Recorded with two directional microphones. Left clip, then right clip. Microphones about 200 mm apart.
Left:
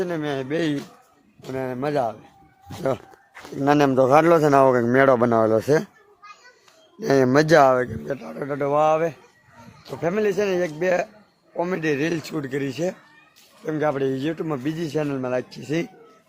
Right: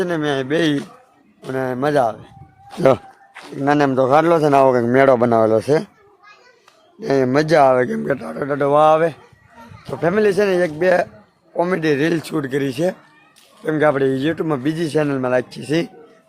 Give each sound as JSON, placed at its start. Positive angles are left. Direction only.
{"t": 0.0, "sound": "a man's voice", "side_deg": 0}
{"t": 3.5, "sound": "a man's voice", "side_deg": 10}
{"t": 7.0, "sound": "speech", "side_deg": 25}
{"t": 8.4, "sound": "a man's voice", "side_deg": -5}